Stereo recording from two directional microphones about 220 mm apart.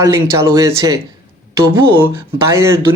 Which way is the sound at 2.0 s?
10° right (ahead or behind).